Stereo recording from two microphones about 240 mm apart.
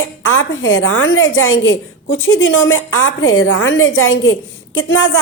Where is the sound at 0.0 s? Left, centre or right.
Left.